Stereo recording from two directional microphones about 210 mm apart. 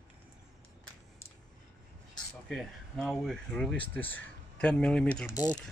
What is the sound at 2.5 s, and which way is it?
Speech, centre (ahead or behind).